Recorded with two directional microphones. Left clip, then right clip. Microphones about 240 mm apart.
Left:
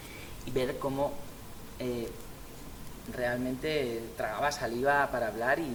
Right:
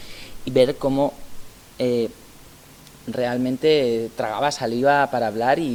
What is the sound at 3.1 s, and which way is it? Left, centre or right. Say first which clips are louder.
A man's voice: right 9 dB; right.